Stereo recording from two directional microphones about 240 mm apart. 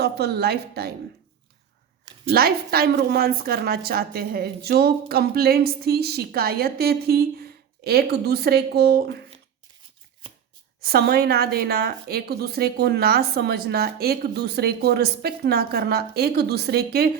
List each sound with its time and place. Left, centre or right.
0.0 s a woman's voice: right
2.3 s a woman's voice: right
10.8 s a woman's voice: right